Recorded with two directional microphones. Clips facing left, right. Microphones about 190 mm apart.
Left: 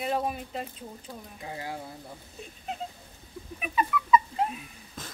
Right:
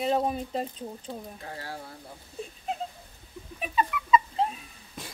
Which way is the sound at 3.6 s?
25° right (ahead or behind).